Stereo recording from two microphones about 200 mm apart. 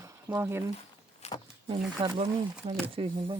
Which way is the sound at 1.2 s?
35° left (ahead or behind).